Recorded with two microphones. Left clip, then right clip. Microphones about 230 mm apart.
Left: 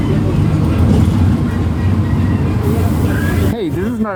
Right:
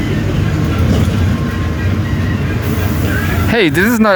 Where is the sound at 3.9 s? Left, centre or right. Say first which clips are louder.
Right 9 dB; right.